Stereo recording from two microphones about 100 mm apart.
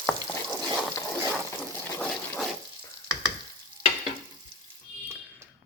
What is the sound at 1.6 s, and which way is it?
Water, 5° left (ahead or behind).